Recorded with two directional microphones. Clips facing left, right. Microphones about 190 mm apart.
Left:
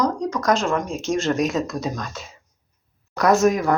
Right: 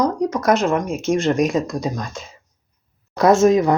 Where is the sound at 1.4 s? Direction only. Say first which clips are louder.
Right 3 dB; centre (ahead or behind).